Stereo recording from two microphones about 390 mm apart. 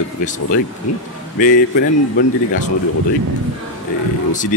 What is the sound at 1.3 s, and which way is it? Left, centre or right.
Speech, centre.